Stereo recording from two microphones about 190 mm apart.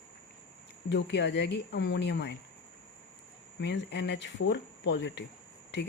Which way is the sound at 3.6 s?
65° left (ahead or behind).